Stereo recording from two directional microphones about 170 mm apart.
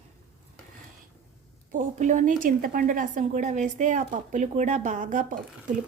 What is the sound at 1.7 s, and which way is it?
A woman's voice, 45° right (ahead or behind).